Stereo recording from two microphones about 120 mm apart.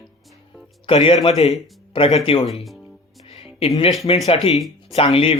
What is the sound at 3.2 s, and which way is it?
Music, 55° left (ahead or behind).